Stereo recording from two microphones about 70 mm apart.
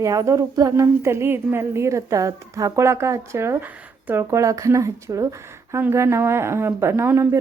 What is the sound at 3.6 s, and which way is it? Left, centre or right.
Speech, right.